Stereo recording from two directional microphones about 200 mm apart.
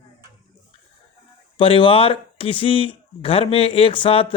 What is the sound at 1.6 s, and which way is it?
Speech, 25° left (ahead or behind).